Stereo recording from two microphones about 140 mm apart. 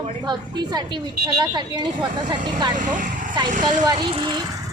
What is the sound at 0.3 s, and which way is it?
Speech, 30° right (ahead or behind).